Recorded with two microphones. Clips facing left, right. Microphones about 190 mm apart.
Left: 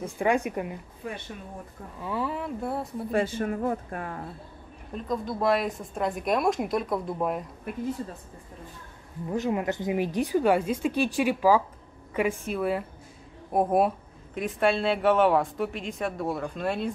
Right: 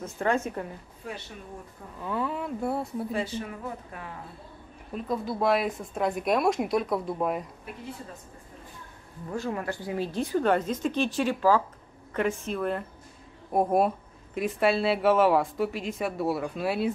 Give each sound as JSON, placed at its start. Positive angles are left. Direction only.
{"t": 0.0, "sound": "speech", "side_deg": 15}
{"t": 2.0, "sound": "speech", "side_deg": 5}
{"t": 3.1, "sound": "speech", "side_deg": 50}
{"t": 4.9, "sound": "speech", "side_deg": -5}
{"t": 9.3, "sound": "speech", "side_deg": 20}